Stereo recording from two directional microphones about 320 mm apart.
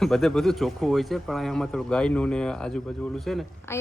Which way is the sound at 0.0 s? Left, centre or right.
Centre.